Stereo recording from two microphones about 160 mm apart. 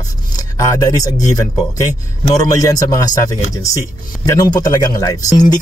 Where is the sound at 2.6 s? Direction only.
25° left (ahead or behind).